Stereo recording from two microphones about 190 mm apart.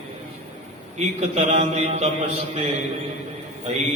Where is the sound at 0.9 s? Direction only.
35° right (ahead or behind).